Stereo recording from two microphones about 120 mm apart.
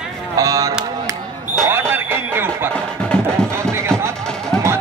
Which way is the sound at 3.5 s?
20° right (ahead or behind).